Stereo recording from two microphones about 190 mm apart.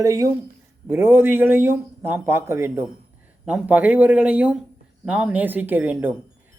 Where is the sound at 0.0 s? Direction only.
20° right (ahead or behind).